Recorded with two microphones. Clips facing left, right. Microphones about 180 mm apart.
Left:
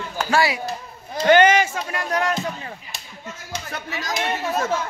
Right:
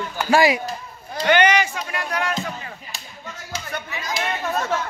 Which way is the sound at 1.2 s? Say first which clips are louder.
Left 3 dB; 45° left (ahead or behind).